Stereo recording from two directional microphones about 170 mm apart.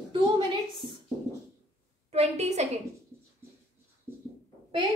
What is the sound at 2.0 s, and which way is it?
Speech, 40° right (ahead or behind).